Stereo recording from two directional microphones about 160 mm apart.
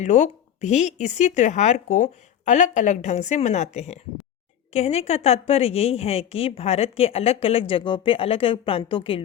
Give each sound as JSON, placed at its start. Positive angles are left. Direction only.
{"t": 0.0, "sound": "a woman's voice", "side_deg": 45}